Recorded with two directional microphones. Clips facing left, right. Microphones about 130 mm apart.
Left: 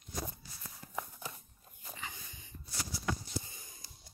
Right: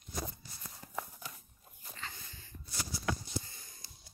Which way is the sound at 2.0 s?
15° left (ahead or behind).